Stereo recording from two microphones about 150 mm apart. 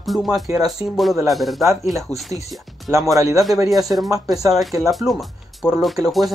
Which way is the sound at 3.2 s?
20° right (ahead or behind).